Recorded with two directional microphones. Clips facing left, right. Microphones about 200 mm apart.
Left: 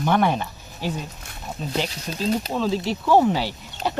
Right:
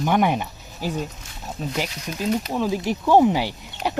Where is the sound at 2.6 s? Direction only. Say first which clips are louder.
Even; 15° right (ahead or behind).